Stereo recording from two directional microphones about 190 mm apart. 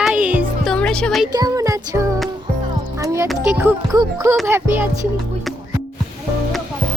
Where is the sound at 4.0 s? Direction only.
15° right (ahead or behind).